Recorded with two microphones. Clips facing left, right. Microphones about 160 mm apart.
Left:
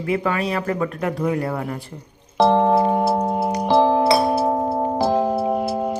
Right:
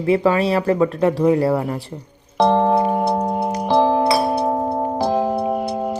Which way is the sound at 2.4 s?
Centre (ahead or behind).